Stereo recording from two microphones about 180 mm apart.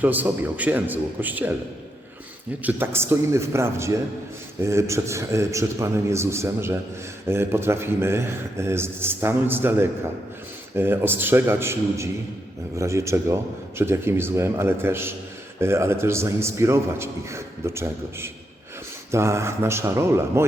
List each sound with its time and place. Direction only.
0.0 s a man's voice: 10° right (ahead or behind)
2.6 s a man's voice: 10° right (ahead or behind)